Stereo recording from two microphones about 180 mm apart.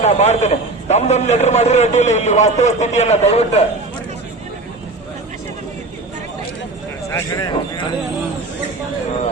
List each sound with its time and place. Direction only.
0.0 s a man's voice: 40° left (ahead or behind)
7.1 s speech: 20° left (ahead or behind)